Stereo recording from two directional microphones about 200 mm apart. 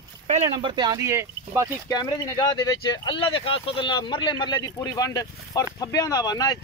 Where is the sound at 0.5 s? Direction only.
20° right (ahead or behind).